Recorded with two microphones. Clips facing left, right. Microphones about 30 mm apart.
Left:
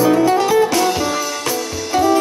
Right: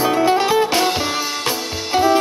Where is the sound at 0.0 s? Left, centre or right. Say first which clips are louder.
Left 2 dB; right.